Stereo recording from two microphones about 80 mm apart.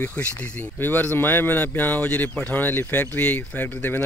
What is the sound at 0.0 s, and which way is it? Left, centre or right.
Speech, centre.